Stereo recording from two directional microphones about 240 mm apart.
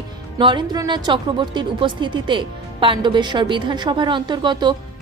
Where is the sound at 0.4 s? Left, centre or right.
Centre.